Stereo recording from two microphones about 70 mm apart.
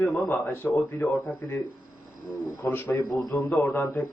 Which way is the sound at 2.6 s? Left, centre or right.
Left.